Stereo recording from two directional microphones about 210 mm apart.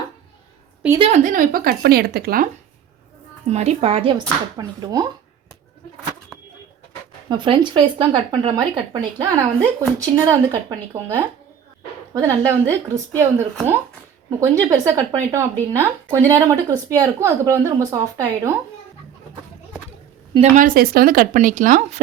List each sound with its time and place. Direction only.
0.9 s speech: 30° right (ahead or behind); by 2.5 s 45° right (ahead or behind)
3.4 s speech: 30° right (ahead or behind)
7.3 s a woman's voice: 20° right (ahead or behind)
20.6 s speech: 45° right (ahead or behind)